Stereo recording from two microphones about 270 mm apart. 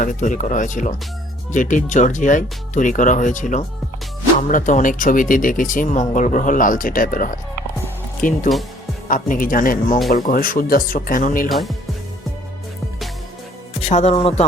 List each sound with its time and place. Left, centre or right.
0.0 s speech: left
11.4 s speech: centre
13.8 s speech: left